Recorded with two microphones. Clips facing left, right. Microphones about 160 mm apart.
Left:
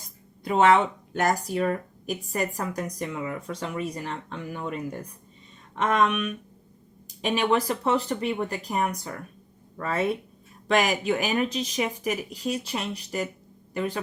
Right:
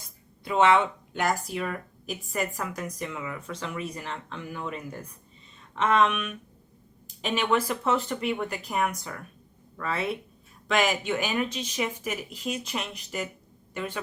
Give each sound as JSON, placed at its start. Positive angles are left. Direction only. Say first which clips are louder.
{"t": 0.4, "sound": "speech", "louder": "left 2 dB", "side_deg": 40}
{"t": 5.8, "sound": "speech", "louder": "even", "side_deg": 45}
{"t": 7.2, "sound": "speech", "louder": "left 2 dB", "side_deg": 40}